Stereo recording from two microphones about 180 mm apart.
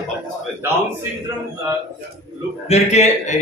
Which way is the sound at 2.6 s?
35° left (ahead or behind).